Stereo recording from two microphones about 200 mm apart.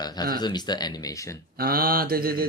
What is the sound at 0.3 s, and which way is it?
Speech, 20° left (ahead or behind).